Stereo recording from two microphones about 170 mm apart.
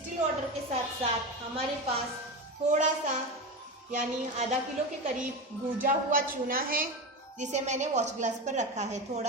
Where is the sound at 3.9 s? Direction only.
45° right (ahead or behind).